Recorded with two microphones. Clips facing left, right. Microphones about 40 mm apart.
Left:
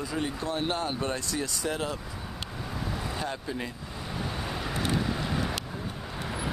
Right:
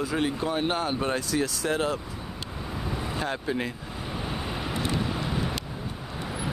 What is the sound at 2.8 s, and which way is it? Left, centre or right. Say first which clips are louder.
Vehicle: right 2 dB; centre.